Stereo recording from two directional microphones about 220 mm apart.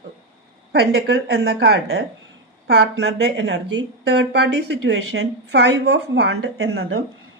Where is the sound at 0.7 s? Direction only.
45° right (ahead or behind).